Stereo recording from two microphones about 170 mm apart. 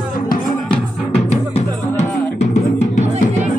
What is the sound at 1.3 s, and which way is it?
Music, 40° left (ahead or behind).